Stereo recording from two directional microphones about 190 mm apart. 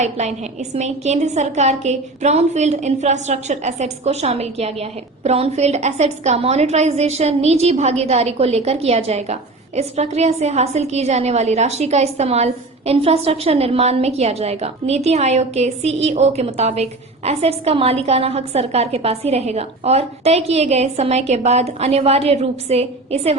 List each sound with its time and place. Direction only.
0.0 s a woman's voice: 35° right (ahead or behind)